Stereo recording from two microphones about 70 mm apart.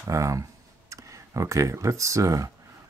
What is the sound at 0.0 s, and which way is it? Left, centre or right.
Speech, right.